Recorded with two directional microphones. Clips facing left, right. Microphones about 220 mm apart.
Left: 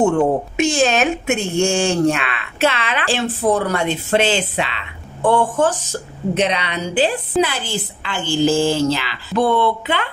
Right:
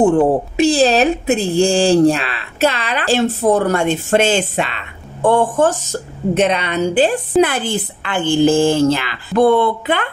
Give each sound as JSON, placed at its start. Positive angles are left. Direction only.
{"t": 0.0, "sound": "a woman's voice", "side_deg": -35}